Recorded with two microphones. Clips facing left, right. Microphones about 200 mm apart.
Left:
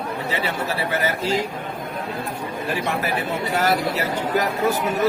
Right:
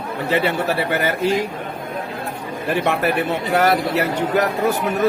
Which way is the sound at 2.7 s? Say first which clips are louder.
Right 6 dB; 60° right (ahead or behind).